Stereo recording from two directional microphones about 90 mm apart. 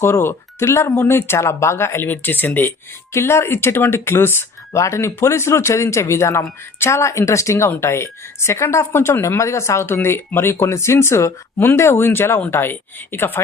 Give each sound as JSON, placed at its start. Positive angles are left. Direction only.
{"t": 0.0, "sound": "speech", "side_deg": 25}